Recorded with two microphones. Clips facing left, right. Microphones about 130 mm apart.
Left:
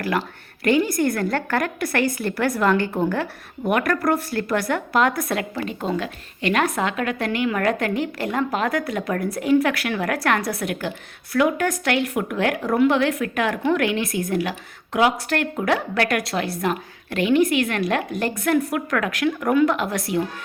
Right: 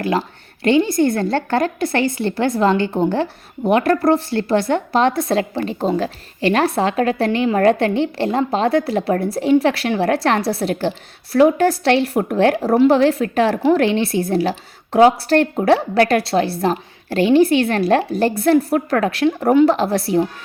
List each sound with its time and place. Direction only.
0.0 s a woman's voice: 25° right (ahead or behind)